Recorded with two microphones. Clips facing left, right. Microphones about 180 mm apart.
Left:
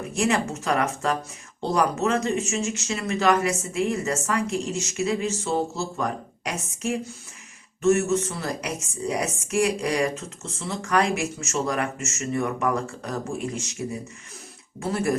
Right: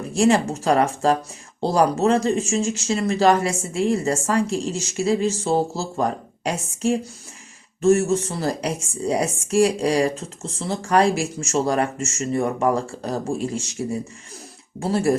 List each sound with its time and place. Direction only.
0.1 s speech: 30° right (ahead or behind)